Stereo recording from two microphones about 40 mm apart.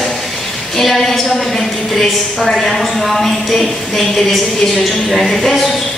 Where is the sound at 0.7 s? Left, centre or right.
Centre.